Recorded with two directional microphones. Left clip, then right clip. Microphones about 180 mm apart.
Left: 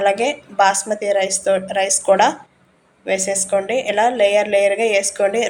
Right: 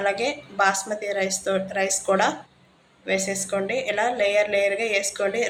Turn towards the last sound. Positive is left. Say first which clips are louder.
# left 7 dB
turn(degrees=25)  # may be behind; listen again after turning